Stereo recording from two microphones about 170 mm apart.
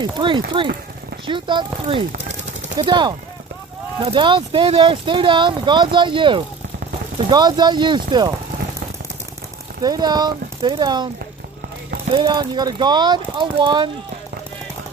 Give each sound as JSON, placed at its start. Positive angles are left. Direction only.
{"t": 0.0, "sound": "speech", "side_deg": -25}
{"t": 9.8, "sound": "speech", "side_deg": -25}
{"t": 12.1, "sound": "speech", "side_deg": -30}